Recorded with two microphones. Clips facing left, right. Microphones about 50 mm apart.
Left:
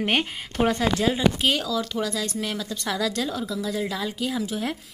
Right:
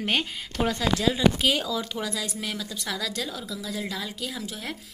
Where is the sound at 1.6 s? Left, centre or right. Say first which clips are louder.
Left 3 dB; centre.